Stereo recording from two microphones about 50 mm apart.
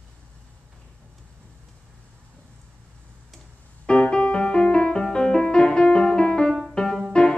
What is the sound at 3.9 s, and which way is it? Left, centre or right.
Music, centre.